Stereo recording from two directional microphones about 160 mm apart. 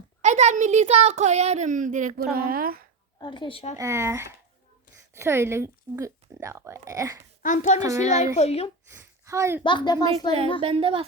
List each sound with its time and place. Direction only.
0.2 s a child's voice: 45° right (ahead or behind)
2.3 s speech: 65° right (ahead or behind)
3.2 s a woman's voice: 30° left (ahead or behind)
3.8 s a woman's voice: 15° right (ahead or behind)
7.4 s speech: 50° left (ahead or behind)
7.8 s speech: 20° right (ahead or behind)
8.4 s a woman's voice: 40° left (ahead or behind)
8.9 s speech: 15° right (ahead or behind)
9.6 s speech: 30° left (ahead or behind)
10.6 s a woman's voice: 35° right (ahead or behind)